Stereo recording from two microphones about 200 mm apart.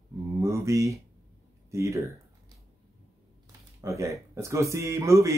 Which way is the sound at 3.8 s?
15° right (ahead or behind).